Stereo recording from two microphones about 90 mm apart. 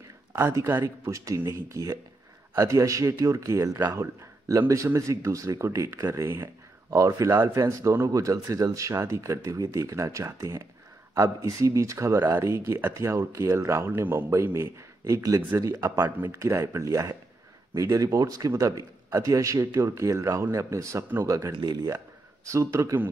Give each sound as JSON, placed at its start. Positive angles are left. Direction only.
{"t": 0.4, "sound": "speech", "side_deg": -35}
{"t": 21.5, "sound": "speech", "side_deg": -50}
{"t": 21.9, "sound": "speech", "side_deg": -35}